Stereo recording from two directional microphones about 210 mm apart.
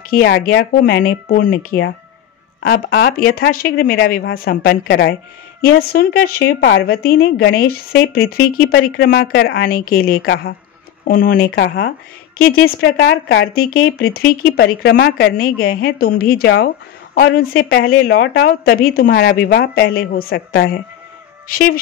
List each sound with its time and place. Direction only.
0.1 s speech: 55° left (ahead or behind)
2.6 s speech: 45° left (ahead or behind)
11.5 s speech: 55° left (ahead or behind)
13.9 s speech: 45° left (ahead or behind)